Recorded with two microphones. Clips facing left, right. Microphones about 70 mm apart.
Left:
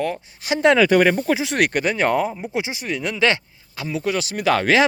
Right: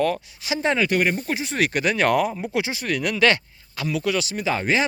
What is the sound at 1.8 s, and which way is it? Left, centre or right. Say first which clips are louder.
Speech: even; left.